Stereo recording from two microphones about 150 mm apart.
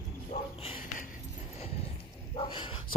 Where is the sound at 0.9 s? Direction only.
60° left (ahead or behind).